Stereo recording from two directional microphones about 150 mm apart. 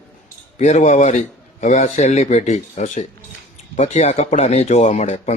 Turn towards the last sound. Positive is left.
turn(degrees=50)  # may be behind; listen again after turning